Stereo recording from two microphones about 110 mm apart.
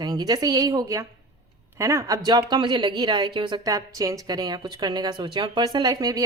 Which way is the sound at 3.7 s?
30° right (ahead or behind).